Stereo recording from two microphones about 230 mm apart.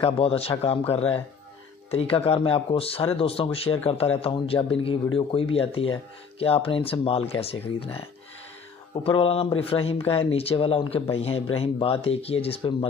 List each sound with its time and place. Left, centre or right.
0.0 s speech: left